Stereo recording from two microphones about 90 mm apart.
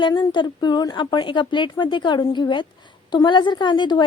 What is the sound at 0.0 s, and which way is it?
A woman's voice, 60° left (ahead or behind).